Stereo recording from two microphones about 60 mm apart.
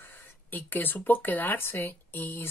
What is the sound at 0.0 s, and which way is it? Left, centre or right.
Speech, left.